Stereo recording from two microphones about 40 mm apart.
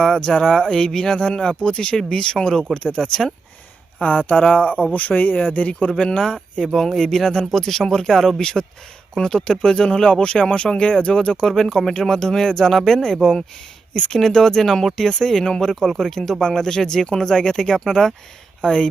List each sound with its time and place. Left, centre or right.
0.0 s speech: centre
4.0 s speech: left
5.5 s speech: left
6.0 s speech: centre
8.4 s speech: centre
11.4 s speech: centre
14.1 s speech: centre